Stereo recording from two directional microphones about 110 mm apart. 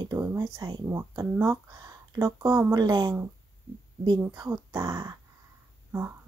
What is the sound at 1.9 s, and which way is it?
Speech, 35° right (ahead or behind).